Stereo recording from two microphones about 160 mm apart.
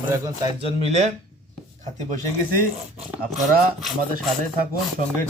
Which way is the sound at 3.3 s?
65° right (ahead or behind).